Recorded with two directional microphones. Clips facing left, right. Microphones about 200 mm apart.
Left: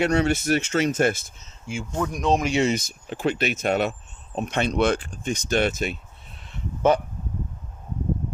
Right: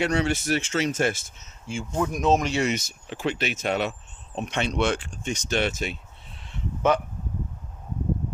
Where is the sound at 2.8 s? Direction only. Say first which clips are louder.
Left 3 dB; 50° left (ahead or behind).